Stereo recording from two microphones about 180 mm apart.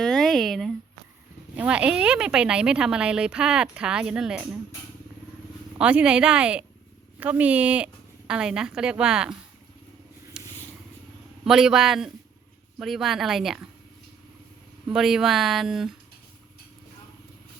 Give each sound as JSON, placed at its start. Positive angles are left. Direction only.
{"t": 0.0, "sound": "a sound", "side_deg": 0}
{"t": 1.5, "sound": "speech", "side_deg": -5}
{"t": 5.8, "sound": "a woman's voice", "side_deg": -5}
{"t": 10.4, "sound": "vehicle", "side_deg": -5}
{"t": 11.4, "sound": "speech", "side_deg": -5}
{"t": 14.8, "sound": "speech", "side_deg": -5}